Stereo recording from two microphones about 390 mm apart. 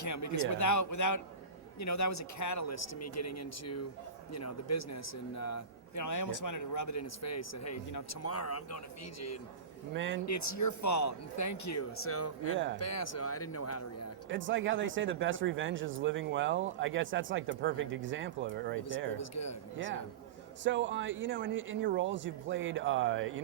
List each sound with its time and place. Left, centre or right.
0.0 s a man's voice: left
9.9 s speech: right
10.2 s a man's voice: left
14.3 s speech: right
19.1 s a man's voice: left
20.7 s speech: right